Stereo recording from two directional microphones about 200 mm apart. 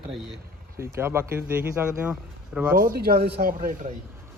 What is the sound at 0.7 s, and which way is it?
Speech, 15° right (ahead or behind).